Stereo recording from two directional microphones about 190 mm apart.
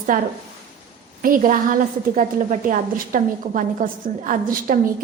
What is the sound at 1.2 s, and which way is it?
A woman's voice, 45° right (ahead or behind).